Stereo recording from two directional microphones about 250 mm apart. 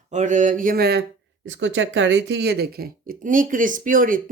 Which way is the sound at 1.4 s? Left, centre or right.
Right.